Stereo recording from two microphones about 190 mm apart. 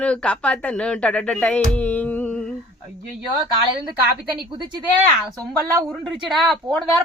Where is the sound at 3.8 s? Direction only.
25° right (ahead or behind).